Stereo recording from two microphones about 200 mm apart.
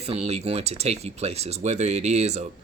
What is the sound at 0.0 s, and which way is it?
Speech, 30° right (ahead or behind).